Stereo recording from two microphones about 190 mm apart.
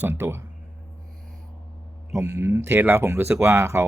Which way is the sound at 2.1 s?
15° right (ahead or behind).